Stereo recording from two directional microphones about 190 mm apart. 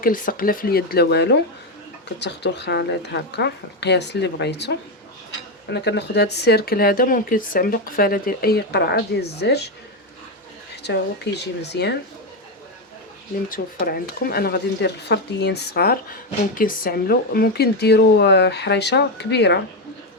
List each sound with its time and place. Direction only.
0.0 s speech: 45° left (ahead or behind)
11.6 s speech: 60° left (ahead or behind)
13.5 s speech: 50° left (ahead or behind)